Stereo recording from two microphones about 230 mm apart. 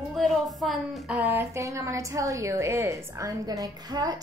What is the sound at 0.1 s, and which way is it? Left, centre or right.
A woman's voice, centre.